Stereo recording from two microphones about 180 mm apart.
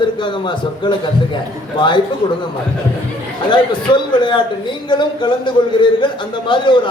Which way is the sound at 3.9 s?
25° left (ahead or behind).